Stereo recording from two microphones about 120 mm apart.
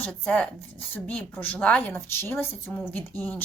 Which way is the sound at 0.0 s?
10° left (ahead or behind).